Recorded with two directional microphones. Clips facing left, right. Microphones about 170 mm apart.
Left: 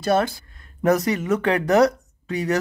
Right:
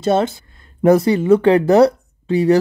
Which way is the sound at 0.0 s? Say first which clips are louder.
Right 4 dB; 25° right (ahead or behind).